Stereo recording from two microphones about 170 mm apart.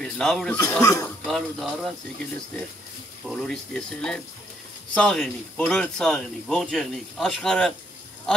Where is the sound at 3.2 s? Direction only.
5° left (ahead or behind).